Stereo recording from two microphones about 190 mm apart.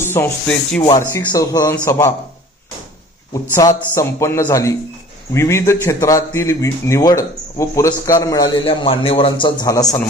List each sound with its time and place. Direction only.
0.0 s a man's voice: 15° left (ahead or behind)
3.5 s a man's voice: 15° left (ahead or behind)